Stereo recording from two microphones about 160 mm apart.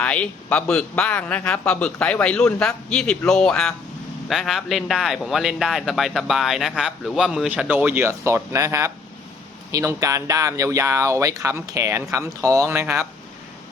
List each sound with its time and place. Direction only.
0.0 s speech: 10° left (ahead or behind); by 13.1 s 15° right (ahead or behind)